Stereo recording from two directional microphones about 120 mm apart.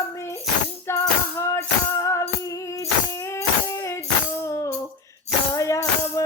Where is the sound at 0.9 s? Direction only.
20° left (ahead or behind).